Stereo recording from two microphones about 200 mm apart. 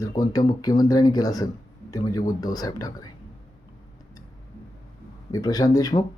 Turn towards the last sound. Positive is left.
turn(degrees=20)  # may be behind; listen again after turning